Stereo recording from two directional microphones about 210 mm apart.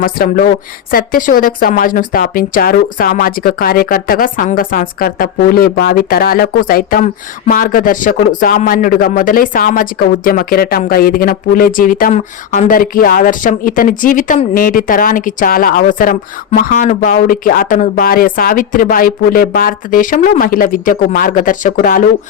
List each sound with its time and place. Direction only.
0.0 s speech: 45° left (ahead or behind)